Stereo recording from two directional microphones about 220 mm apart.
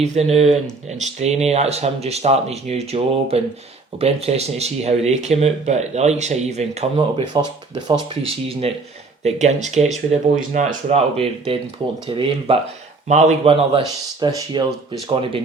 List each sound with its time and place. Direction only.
0.0 s speech: 30° right (ahead or behind)